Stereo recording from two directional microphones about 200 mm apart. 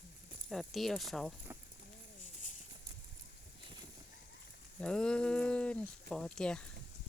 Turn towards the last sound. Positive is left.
turn(degrees=5)  # may be behind; listen again after turning